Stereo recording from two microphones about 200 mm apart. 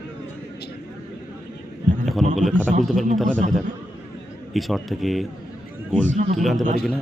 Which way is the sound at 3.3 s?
40° right (ahead or behind).